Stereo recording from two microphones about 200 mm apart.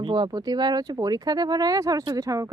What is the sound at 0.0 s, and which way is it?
Speech, 25° right (ahead or behind).